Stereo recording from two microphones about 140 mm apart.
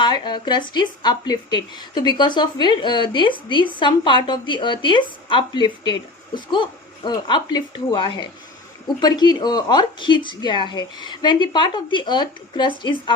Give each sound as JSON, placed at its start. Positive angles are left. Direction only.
{"t": 0.0, "sound": "a woman's voice", "side_deg": 30}